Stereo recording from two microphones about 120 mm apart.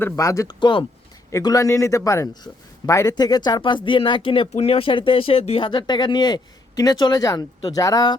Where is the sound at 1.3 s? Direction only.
30° left (ahead or behind); by 5.6 s 55° left (ahead or behind).